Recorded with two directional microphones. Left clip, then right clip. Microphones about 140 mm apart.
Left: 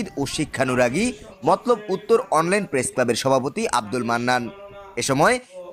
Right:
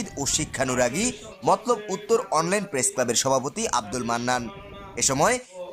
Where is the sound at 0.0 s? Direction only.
15° left (ahead or behind).